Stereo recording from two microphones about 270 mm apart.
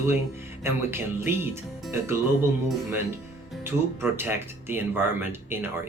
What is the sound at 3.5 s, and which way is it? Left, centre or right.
Speech, centre.